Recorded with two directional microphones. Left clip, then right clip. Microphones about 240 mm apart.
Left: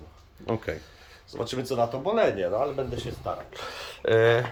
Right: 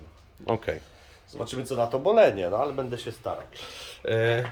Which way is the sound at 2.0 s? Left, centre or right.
Right.